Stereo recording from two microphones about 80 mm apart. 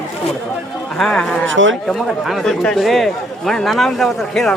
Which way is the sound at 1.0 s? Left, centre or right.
Centre.